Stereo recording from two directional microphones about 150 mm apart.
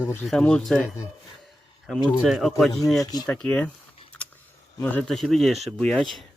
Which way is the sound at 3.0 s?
25° left (ahead or behind).